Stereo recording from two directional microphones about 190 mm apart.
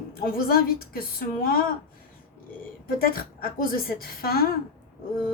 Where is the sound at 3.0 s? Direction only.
50° left (ahead or behind).